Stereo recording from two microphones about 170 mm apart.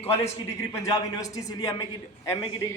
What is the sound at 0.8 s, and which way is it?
A man's voice, 20° left (ahead or behind).